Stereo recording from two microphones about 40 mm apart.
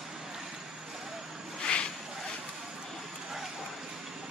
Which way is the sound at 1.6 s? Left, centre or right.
Left.